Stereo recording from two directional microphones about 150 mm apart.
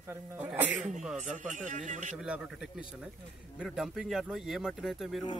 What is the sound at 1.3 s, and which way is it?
Speech, 60° right (ahead or behind).